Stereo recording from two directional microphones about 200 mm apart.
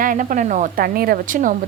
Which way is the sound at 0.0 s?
40° right (ahead or behind).